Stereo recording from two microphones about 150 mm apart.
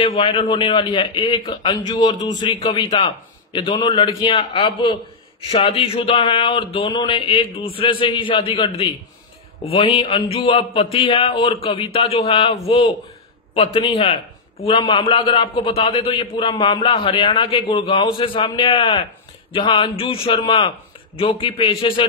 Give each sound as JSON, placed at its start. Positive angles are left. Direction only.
{"t": 0.0, "sound": "a man's voice", "side_deg": 40}